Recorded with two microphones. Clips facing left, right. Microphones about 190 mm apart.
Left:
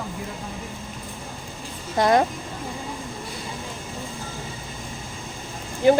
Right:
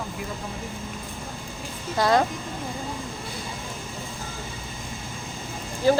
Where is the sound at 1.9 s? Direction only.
20° left (ahead or behind).